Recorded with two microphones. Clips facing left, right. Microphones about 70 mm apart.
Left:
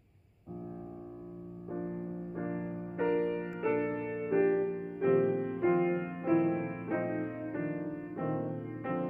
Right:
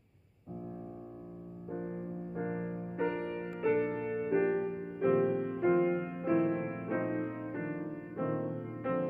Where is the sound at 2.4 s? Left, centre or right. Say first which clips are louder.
Right 1 dB; centre.